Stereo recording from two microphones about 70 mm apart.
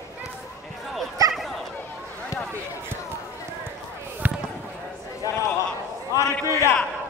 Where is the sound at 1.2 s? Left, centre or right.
Right.